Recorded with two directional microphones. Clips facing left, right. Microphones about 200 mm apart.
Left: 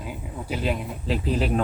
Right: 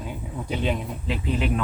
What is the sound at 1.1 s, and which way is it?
Speech, 40° left (ahead or behind).